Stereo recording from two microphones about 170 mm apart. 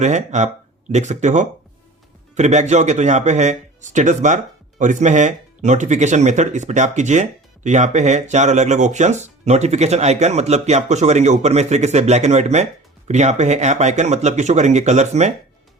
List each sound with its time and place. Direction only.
0.0 s speech: 45° right (ahead or behind)